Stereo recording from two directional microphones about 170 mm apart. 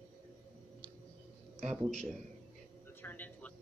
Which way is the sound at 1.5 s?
40° right (ahead or behind).